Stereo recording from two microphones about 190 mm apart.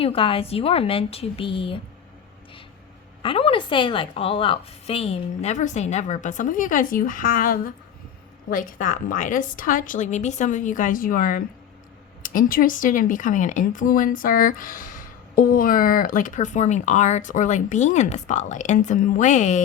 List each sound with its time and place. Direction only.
0.0 s a woman's voice: 30° left (ahead or behind)
3.2 s a woman's voice: 30° left (ahead or behind)